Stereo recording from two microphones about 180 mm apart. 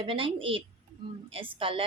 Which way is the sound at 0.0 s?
30° right (ahead or behind).